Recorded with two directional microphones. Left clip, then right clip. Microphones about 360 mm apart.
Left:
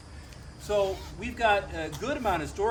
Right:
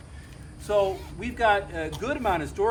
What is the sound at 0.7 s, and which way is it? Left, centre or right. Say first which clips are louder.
Speech: right 3 dB; centre.